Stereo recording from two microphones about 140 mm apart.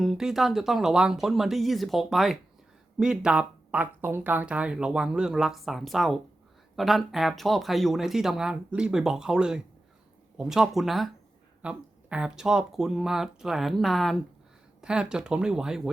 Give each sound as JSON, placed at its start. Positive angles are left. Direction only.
{"t": 0.0, "sound": "speech", "side_deg": 0}